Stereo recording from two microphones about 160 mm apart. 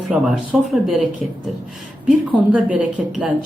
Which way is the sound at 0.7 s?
Centre (ahead or behind).